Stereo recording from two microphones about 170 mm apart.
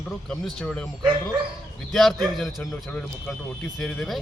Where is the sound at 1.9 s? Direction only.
Centre (ahead or behind).